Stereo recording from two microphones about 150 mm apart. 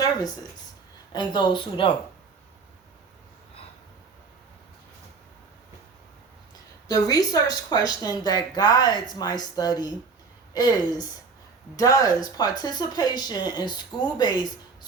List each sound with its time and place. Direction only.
0.0 s a sound: 25° left (ahead or behind)
1.1 s speech: 30° left (ahead or behind)
6.8 s speech: 25° left (ahead or behind)